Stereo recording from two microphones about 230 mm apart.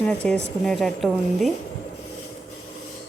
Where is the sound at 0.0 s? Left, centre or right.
Centre.